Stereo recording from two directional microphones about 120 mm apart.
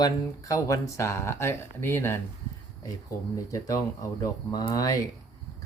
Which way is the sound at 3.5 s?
25° left (ahead or behind).